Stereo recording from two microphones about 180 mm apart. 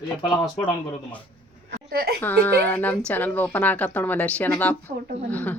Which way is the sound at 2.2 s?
10° left (ahead or behind).